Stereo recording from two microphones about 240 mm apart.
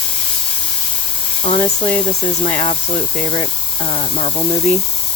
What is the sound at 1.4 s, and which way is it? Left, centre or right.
Speech, left.